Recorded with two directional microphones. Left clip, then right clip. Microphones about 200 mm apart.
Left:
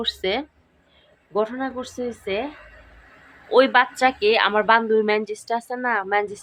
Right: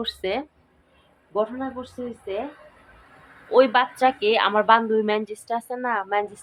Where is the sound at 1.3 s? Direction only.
15° left (ahead or behind).